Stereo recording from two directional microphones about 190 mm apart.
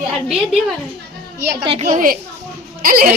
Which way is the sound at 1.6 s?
30° right (ahead or behind).